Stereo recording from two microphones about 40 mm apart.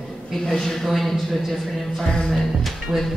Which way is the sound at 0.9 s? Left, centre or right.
Centre.